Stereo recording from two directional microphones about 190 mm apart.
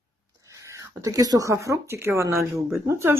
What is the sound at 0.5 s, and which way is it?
Speech, 15° right (ahead or behind).